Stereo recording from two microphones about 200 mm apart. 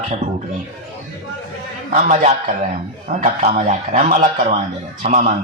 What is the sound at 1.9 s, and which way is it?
A man's voice, 35° right (ahead or behind).